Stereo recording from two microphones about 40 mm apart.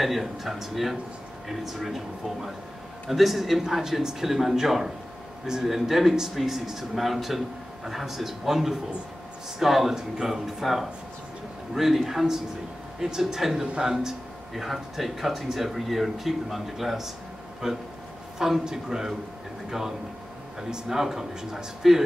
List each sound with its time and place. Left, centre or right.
0.0 s speech: centre
3.1 s a man's voice: centre
10.6 s a man's voice: centre
14.5 s a man's voice: centre
20.7 s a man's voice: centre